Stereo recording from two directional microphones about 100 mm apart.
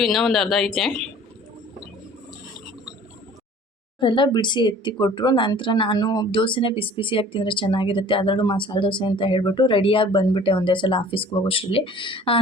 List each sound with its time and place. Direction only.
0.0 s speech: 5° left (ahead or behind)
4.0 s speech: 55° left (ahead or behind)
6.3 s speech: 55° left (ahead or behind)